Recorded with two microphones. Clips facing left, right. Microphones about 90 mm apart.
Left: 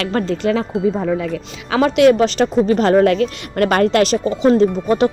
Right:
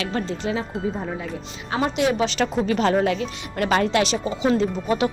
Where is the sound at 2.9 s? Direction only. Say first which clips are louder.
Left 8 dB; 60° left (ahead or behind).